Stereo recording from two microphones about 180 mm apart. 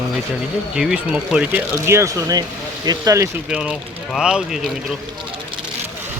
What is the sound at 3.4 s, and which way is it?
Speech, 5° right (ahead or behind).